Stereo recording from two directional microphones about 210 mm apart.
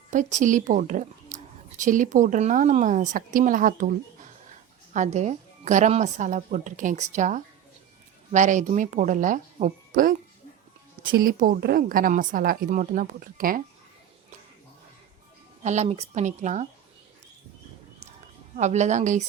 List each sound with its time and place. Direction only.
0.1 s a woman's voice: 35° right (ahead or behind)
11.2 s a woman's voice: 40° right (ahead or behind)
15.6 s a woman's voice: 35° right (ahead or behind)
18.5 s a woman's voice: 35° right (ahead or behind)